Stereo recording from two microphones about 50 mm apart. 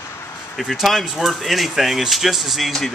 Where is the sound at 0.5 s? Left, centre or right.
Centre.